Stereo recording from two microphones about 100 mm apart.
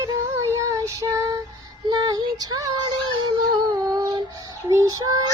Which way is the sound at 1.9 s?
45° right (ahead or behind).